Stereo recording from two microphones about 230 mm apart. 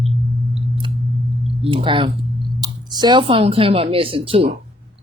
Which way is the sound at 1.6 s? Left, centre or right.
Right.